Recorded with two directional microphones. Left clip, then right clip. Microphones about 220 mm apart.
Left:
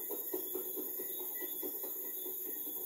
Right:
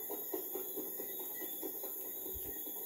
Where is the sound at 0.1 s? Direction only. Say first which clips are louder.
Left 1 dB; 50° left (ahead or behind).